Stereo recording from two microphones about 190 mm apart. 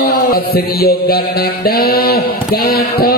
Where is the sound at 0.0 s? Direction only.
50° left (ahead or behind).